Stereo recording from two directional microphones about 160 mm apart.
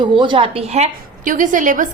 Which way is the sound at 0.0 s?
30° right (ahead or behind).